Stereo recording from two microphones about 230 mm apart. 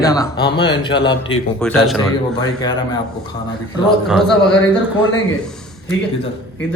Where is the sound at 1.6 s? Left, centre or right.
Centre.